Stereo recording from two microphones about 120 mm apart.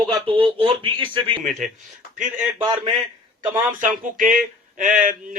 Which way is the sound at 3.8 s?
90° right.